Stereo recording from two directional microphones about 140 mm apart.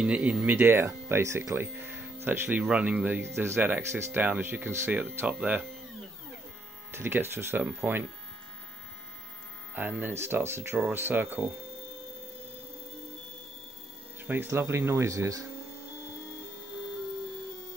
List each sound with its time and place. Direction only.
0.0 s speech: 10° right (ahead or behind)
6.9 s speech: 15° right (ahead or behind)
9.8 s speech: 15° right (ahead or behind)
14.2 s speech: 15° right (ahead or behind)